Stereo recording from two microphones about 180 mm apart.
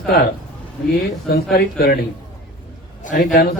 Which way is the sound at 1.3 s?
60° left (ahead or behind).